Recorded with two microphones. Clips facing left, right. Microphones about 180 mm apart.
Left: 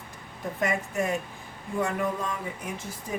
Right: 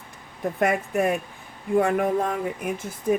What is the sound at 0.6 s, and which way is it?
Speech, 60° right (ahead or behind).